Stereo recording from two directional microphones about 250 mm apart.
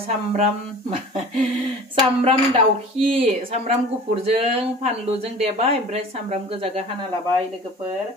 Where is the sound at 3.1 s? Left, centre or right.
Right.